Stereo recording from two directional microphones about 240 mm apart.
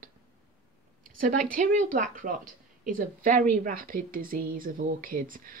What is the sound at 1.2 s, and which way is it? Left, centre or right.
A woman's voice, right.